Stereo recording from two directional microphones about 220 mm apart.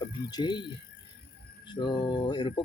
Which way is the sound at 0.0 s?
20° left (ahead or behind).